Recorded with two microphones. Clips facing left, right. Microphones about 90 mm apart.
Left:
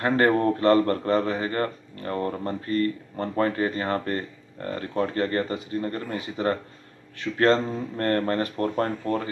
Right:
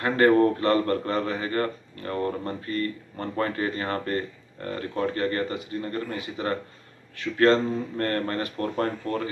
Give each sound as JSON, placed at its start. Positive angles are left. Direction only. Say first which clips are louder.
{"t": 0.0, "sound": "speech", "louder": "right 2 dB", "side_deg": 25}